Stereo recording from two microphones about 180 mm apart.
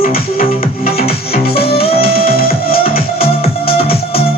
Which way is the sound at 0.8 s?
55° left (ahead or behind).